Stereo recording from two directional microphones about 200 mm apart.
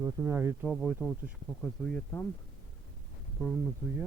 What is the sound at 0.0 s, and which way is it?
Speech, 10° right (ahead or behind).